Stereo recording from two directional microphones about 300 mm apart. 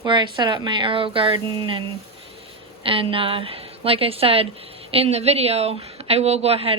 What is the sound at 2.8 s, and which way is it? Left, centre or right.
A woman's voice, centre.